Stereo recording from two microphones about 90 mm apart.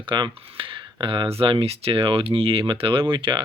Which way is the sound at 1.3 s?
85° right.